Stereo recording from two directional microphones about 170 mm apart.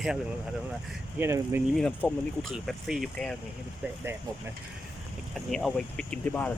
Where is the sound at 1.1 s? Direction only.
15° right (ahead or behind).